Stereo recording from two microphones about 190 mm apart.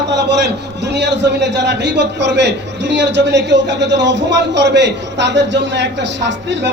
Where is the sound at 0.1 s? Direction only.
65° right (ahead or behind).